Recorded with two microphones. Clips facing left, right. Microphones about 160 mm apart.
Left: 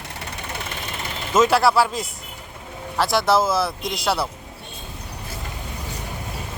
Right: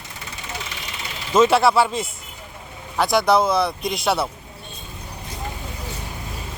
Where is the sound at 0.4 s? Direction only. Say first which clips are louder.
Even; 55° left (ahead or behind).